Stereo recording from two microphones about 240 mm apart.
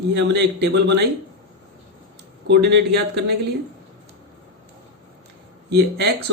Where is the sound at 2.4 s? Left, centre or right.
Right.